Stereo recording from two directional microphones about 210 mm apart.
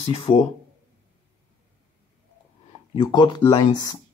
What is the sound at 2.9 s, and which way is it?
Speech, 20° left (ahead or behind).